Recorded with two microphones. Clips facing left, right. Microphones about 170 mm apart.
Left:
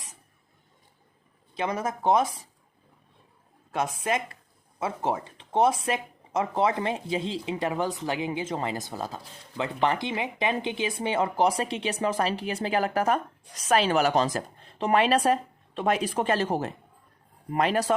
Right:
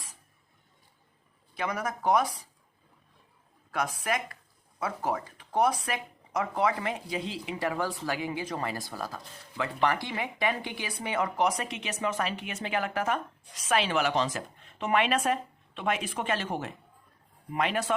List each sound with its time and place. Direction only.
1.5 s speech: 25° left (ahead or behind)
4.0 s speech: 25° left (ahead or behind)